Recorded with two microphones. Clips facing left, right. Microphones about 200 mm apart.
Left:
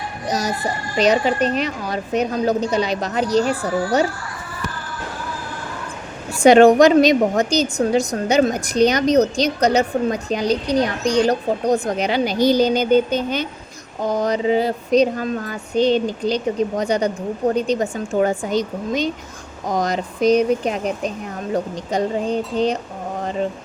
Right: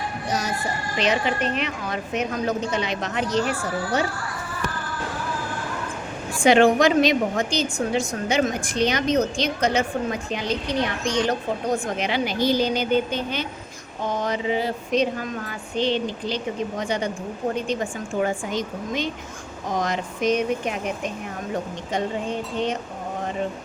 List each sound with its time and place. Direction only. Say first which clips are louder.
0.3 s a woman's voice: left 5 dB; 40° left (ahead or behind)
6.4 s a woman's voice: left 6 dB; 40° left (ahead or behind)